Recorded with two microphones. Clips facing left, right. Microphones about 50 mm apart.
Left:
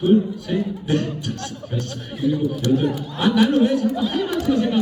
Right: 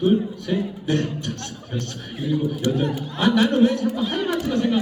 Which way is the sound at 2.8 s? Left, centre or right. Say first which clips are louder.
Left 1 dB; centre.